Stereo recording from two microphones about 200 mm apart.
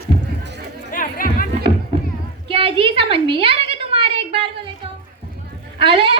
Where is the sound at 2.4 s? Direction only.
25° right (ahead or behind).